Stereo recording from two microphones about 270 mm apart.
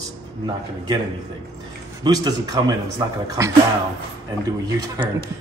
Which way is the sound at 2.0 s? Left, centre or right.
Centre.